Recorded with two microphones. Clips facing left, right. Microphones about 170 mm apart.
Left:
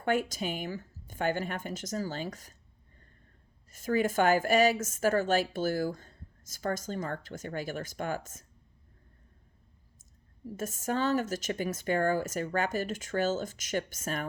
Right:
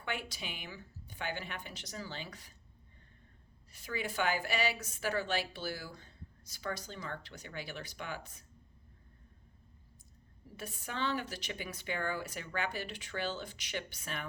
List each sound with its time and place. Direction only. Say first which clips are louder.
0.0 s a woman's voice: left 11 dB; 45° left (ahead or behind)
3.7 s a woman's voice: left 11 dB; 45° left (ahead or behind)
10.0 s a woman's voice: left 15 dB; 45° left (ahead or behind)